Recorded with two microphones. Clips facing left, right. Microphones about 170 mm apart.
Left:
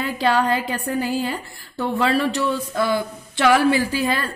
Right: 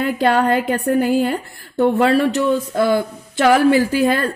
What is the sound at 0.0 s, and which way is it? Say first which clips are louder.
A woman's voice: right 4 dB; 55° right (ahead or behind).